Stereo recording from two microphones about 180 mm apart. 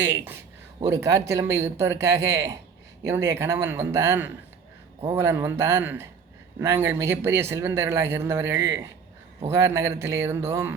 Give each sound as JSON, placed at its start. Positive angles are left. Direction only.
{"t": 0.0, "sound": "speech", "side_deg": -15}